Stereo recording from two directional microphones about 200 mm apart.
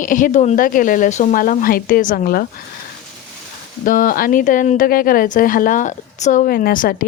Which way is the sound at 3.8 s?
45° left (ahead or behind).